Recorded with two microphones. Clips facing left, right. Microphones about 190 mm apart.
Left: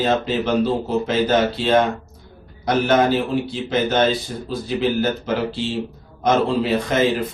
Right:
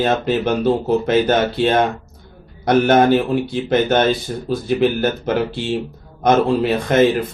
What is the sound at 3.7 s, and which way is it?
Speech, 55° right (ahead or behind).